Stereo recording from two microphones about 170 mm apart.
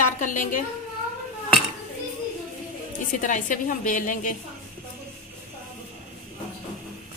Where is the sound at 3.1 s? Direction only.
50° left (ahead or behind).